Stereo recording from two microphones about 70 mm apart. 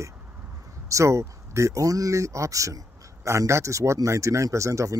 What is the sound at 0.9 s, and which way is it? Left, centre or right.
Speech, right.